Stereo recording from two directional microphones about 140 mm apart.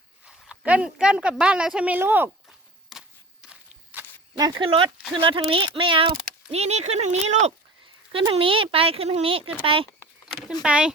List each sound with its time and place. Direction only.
0.4 s speech: 10° right (ahead or behind)
4.0 s a sound: 15° right (ahead or behind)
4.4 s speech: 30° right (ahead or behind)
6.5 s speech: 50° right (ahead or behind)
8.1 s speech: 40° right (ahead or behind)
10.6 s speech: 5° right (ahead or behind)